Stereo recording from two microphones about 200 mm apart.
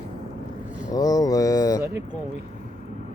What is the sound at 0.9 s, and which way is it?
Mantra, 20° left (ahead or behind).